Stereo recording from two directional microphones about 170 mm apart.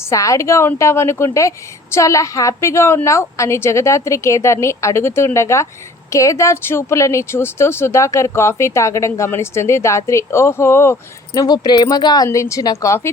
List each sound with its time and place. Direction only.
0.1 s a woman's voice: 20° left (ahead or behind)